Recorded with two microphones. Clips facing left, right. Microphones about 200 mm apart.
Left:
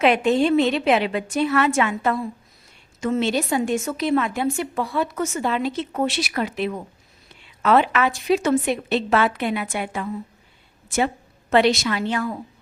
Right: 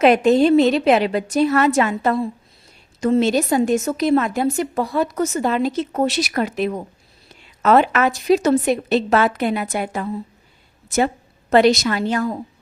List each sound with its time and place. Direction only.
0.0 s a woman's voice: 40° right (ahead or behind)